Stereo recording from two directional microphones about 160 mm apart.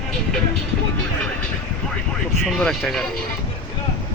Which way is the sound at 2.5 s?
5° left (ahead or behind).